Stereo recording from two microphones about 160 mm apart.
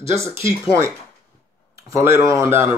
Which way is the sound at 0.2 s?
15° right (ahead or behind).